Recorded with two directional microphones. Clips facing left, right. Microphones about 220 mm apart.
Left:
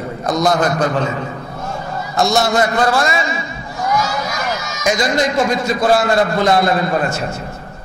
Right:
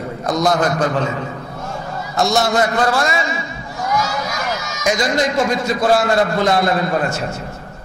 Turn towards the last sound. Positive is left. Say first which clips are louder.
# left 1 dB
turn(degrees=20)  # may be behind; listen again after turning